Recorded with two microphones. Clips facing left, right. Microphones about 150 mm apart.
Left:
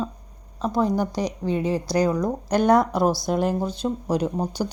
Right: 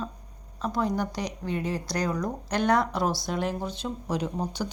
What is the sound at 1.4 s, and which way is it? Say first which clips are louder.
Speech: left 6 dB; 30° left (ahead or behind).